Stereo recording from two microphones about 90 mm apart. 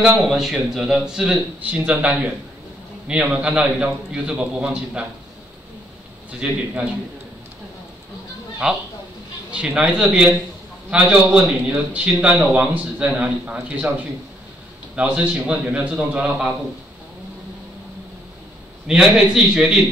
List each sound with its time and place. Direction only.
0.3 s a man's voice: 5° right (ahead or behind)
6.4 s a man's voice: 15° right (ahead or behind)
8.6 s a man's voice: 10° right (ahead or behind)
18.9 s a man's voice: 5° right (ahead or behind)